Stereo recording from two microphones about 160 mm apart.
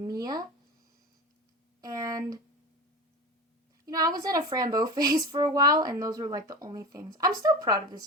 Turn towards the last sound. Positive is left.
turn(degrees=-25)  # may be behind; listen again after turning